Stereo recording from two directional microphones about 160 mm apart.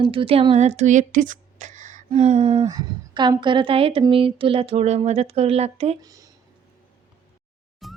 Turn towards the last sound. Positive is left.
turn(degrees=0)  # may be behind; listen again after turning